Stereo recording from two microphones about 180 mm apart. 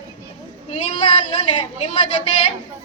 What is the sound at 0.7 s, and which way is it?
A woman's voice, 25° left (ahead or behind).